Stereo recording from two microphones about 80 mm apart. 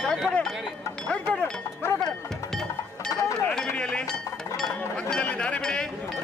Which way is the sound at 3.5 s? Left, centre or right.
Centre.